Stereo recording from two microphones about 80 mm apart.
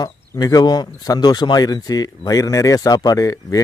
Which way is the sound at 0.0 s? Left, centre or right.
Left.